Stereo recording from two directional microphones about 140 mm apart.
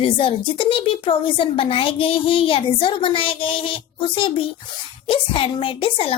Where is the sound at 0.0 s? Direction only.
35° left (ahead or behind).